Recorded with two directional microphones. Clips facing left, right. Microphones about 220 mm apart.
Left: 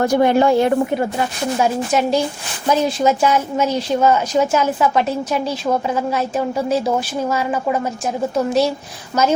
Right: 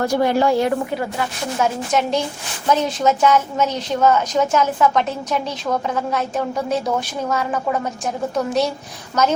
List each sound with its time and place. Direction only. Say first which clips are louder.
0.0 s speech: left 3 dB; 20° left (ahead or behind)
1.5 s a woman's voice: left 2 dB; 10° left (ahead or behind)